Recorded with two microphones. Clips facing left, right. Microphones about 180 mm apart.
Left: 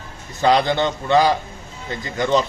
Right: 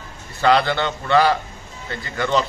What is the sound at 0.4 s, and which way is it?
A man's voice, 15° left (ahead or behind).